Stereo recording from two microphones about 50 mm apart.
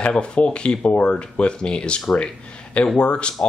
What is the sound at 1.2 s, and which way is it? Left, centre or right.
Speech, centre.